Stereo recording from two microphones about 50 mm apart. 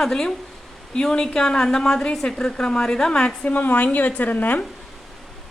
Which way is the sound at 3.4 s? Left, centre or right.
Left.